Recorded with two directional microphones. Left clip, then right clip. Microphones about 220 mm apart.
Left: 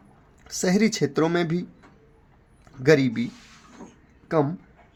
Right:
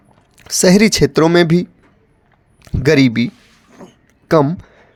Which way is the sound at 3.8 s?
60° right (ahead or behind).